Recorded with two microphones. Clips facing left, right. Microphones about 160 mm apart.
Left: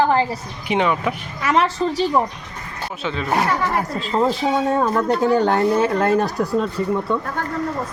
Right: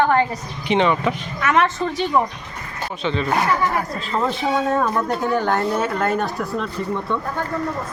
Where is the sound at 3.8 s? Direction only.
30° left (ahead or behind).